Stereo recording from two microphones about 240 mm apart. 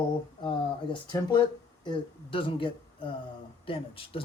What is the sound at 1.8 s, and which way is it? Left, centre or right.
Speech, left.